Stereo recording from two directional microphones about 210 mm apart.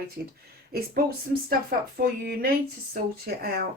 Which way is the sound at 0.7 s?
45° right (ahead or behind).